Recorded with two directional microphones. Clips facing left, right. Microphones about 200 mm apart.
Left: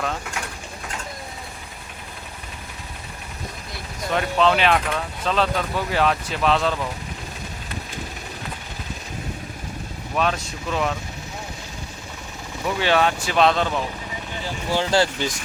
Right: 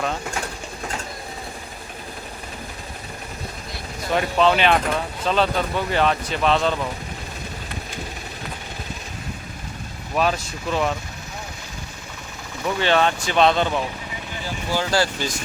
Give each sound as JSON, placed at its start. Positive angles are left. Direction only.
{"t": 4.1, "sound": "speech", "side_deg": 0}
{"t": 10.2, "sound": "speech", "side_deg": -5}
{"t": 12.6, "sound": "speech", "side_deg": 5}
{"t": 14.7, "sound": "speech", "side_deg": 25}